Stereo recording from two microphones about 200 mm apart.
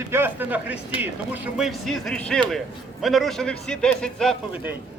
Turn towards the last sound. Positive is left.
turn(degrees=0)  # may be behind; listen again after turning